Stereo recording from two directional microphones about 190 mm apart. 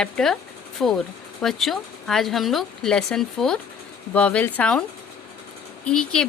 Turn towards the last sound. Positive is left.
turn(degrees=5)  # may be behind; listen again after turning